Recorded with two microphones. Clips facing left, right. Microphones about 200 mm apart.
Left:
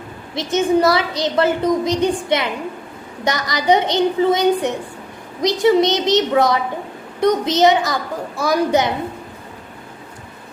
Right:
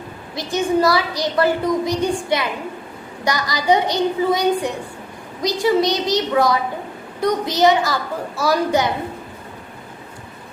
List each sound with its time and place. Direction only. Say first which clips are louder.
0.3 s a woman's voice: left 2 dB; 20° left (ahead or behind)